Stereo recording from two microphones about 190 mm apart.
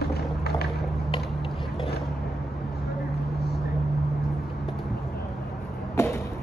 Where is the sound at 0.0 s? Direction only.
55° left (ahead or behind).